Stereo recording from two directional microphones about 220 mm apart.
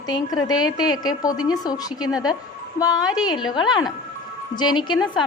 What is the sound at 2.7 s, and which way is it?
A woman's voice, 15° left (ahead or behind).